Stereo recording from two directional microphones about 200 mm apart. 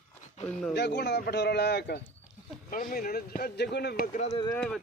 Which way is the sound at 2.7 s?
45° left (ahead or behind).